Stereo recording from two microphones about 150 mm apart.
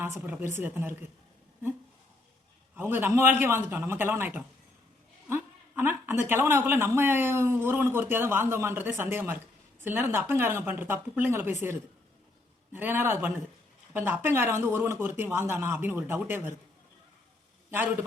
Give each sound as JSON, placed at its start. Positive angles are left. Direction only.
{"t": 0.0, "sound": "a woman's voice", "side_deg": -15}
{"t": 2.7, "sound": "a woman's voice", "side_deg": -15}